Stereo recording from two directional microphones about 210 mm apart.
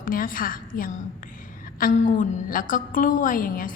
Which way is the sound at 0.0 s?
40° left (ahead or behind).